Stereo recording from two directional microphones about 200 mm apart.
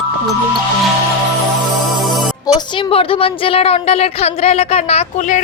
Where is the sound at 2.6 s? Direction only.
25° left (ahead or behind).